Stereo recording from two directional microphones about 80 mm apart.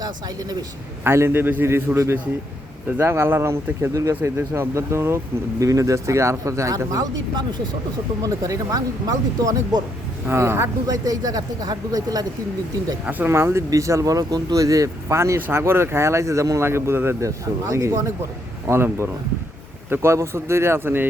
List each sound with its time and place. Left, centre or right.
1.0 s a man's voice: right
3.0 s speech: right
8.2 s speech: right
10.2 s speech: right
10.8 s speech: right
13.1 s a man's voice: right